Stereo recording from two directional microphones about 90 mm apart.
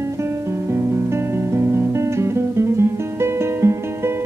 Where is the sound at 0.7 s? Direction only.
30° right (ahead or behind).